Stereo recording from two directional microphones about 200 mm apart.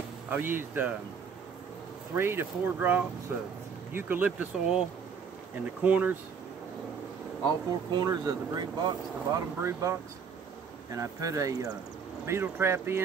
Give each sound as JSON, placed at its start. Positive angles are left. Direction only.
{"t": 0.3, "sound": "speech", "side_deg": -10}
{"t": 2.1, "sound": "speech", "side_deg": -10}
{"t": 5.9, "sound": "speech", "side_deg": -10}
{"t": 7.9, "sound": "speech", "side_deg": -20}